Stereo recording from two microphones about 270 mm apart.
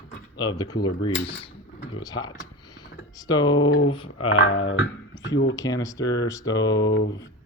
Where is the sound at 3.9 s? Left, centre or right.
Centre.